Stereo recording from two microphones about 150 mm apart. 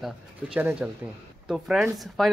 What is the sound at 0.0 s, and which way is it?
Speech, 5° right (ahead or behind).